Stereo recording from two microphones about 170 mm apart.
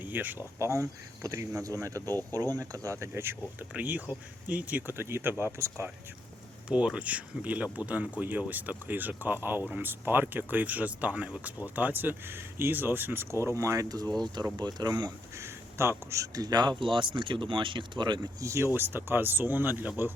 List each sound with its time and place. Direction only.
0.0 s speech: 10° right (ahead or behind)
6.7 s speech: 5° right (ahead or behind)